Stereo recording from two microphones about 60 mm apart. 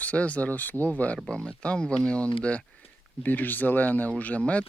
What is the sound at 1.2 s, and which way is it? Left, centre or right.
Speech, centre.